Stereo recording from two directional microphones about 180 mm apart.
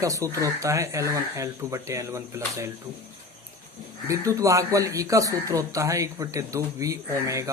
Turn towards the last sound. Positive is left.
turn(degrees=-20)  # may be behind; listen again after turning